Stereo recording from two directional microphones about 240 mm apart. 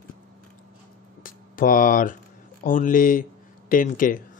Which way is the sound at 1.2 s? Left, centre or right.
Left.